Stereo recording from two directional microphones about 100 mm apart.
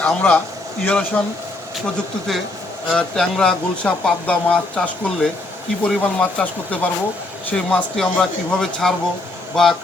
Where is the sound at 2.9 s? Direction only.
5° left (ahead or behind).